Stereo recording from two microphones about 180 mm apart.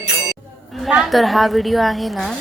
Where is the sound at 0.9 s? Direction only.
5° right (ahead or behind).